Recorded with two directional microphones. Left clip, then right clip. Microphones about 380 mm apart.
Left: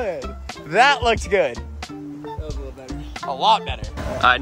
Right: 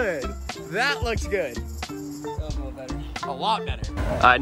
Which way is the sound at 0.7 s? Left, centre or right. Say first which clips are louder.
Left 9 dB; centre.